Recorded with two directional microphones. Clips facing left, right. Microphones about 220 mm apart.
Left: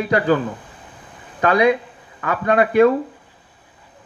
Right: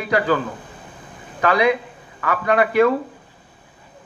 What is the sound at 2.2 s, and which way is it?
Speech, 30° left (ahead or behind).